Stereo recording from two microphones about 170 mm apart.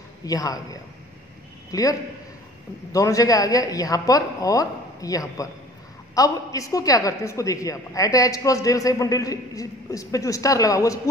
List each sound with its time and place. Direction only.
0.2 s a woman's voice: 20° left (ahead or behind)